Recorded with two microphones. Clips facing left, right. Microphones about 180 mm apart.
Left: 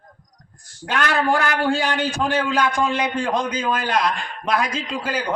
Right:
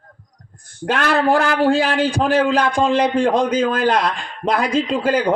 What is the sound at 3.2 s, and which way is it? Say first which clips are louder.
A man's voice: right 7 dB; 60° right (ahead or behind).